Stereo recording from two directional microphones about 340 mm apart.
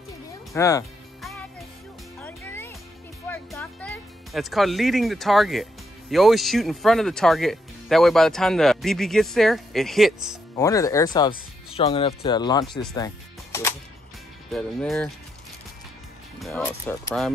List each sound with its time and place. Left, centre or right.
0.5 s music: centre
3.3 s speech: centre
10.5 s speech: centre
16.3 s speech: centre